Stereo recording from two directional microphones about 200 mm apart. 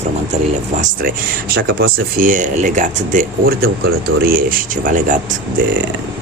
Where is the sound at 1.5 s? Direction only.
50° right (ahead or behind).